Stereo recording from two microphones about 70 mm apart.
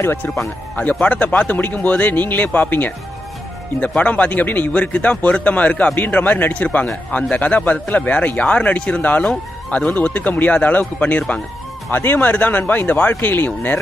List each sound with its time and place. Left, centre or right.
0.0 s speech: left
0.7 s speech: left